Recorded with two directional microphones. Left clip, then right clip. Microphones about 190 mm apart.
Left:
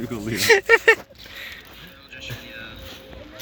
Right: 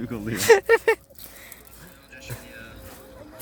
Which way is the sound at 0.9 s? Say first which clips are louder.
Left 6 dB; 10° right (ahead or behind).